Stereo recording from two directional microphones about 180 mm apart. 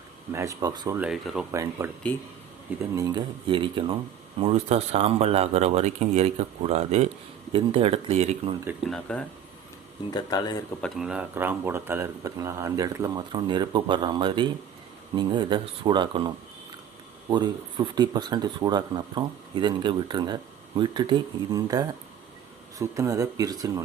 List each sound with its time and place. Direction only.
0.3 s speech: 15° right (ahead or behind)
0.9 s speech: 5° right (ahead or behind)
1.8 s speech: 15° right (ahead or behind); by 8.5 s 35° right (ahead or behind)
8.8 s speech: 5° left (ahead or behind)
10.1 s speech: 20° left (ahead or behind)
10.8 s speech: centre (ahead or behind); by 23.8 s 20° right (ahead or behind)